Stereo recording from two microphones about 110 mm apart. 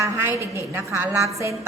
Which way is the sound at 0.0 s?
25° right (ahead or behind).